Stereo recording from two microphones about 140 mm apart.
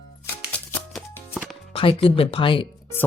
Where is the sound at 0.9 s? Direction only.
5° right (ahead or behind).